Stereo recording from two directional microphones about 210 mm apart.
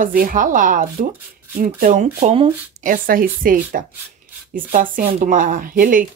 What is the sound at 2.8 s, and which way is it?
Speech, 40° right (ahead or behind).